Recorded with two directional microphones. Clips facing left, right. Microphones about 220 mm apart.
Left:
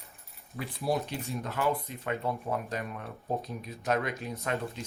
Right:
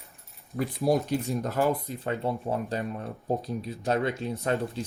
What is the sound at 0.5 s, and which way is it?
Speech, 45° right (ahead or behind).